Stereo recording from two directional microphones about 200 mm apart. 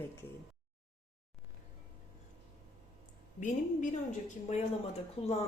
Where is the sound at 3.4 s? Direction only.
40° left (ahead or behind).